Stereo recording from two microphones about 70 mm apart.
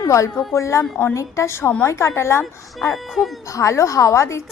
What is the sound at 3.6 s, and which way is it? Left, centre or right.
Speech, left.